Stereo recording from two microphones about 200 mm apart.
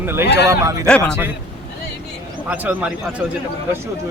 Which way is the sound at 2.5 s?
10° right (ahead or behind).